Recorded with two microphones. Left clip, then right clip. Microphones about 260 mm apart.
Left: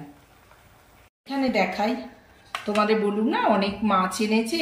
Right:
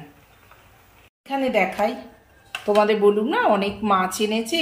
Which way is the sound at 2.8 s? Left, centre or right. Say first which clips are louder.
Right 5 dB; centre.